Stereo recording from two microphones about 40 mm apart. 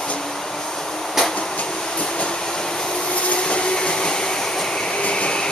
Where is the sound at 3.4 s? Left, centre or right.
Left.